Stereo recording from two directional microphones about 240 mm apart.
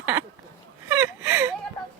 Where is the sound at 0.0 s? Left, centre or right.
Centre.